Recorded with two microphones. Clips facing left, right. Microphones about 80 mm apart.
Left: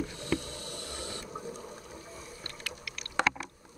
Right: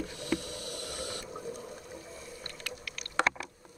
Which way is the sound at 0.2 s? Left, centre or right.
Left.